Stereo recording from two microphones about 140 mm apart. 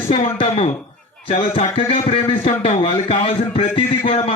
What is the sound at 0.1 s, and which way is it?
A man's voice, 45° left (ahead or behind).